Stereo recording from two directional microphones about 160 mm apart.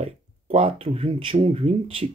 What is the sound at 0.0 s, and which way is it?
Speech, 35° right (ahead or behind).